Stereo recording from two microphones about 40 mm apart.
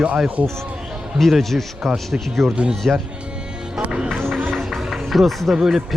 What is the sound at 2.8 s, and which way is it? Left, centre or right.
Speech, centre.